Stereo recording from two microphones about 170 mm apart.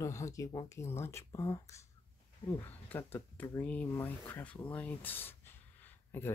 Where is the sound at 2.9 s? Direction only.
10° left (ahead or behind).